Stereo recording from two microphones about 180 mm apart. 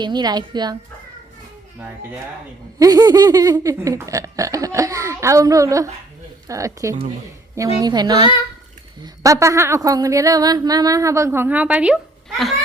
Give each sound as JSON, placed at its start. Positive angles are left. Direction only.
{"t": 0.0, "sound": "a woman's voice", "side_deg": -25}
{"t": 2.7, "sound": "a woman's voice", "side_deg": -20}